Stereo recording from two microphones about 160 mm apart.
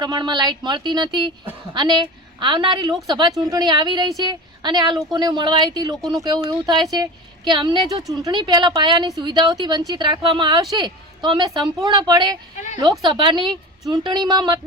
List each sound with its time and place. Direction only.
0.0 s a woman's voice: 25° right (ahead or behind)